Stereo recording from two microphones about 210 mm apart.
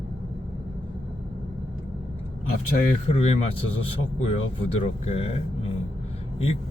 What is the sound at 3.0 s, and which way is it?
Speech, 30° left (ahead or behind).